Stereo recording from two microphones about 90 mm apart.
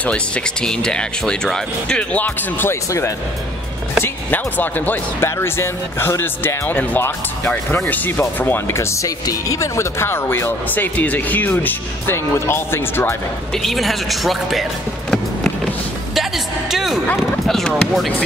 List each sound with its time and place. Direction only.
0.0 s speech: 10° left (ahead or behind)
2.7 s speech: 35° left (ahead or behind)
4.0 s speech: 20° left (ahead or behind)
13.6 s speech: centre (ahead or behind)
16.7 s speech: 5° right (ahead or behind)